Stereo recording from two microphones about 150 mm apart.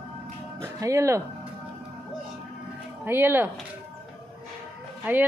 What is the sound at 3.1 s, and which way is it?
Speech, 15° right (ahead or behind).